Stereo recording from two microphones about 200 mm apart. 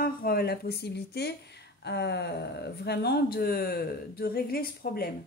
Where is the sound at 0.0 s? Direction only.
50° left (ahead or behind).